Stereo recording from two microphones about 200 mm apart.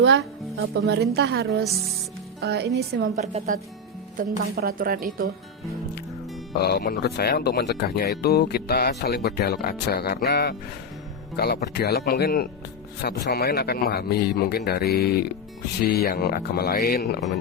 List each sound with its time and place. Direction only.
0.0 s a woman's voice: 65° right (ahead or behind)
3.2 s a woman's voice: 40° right (ahead or behind)
6.6 s speech: 50° left (ahead or behind)